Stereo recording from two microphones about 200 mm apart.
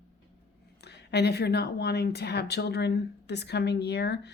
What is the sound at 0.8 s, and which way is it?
Speech, 55° left (ahead or behind).